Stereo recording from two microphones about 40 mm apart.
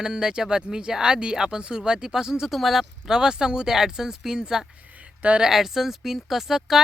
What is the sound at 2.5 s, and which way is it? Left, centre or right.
Speech, centre.